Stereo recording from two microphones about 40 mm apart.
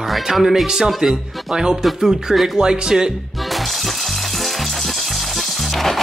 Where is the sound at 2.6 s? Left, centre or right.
Centre.